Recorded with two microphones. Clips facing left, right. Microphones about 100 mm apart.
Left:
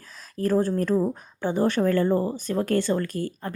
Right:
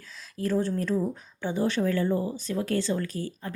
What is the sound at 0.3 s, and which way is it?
A woman's voice, 45° left (ahead or behind).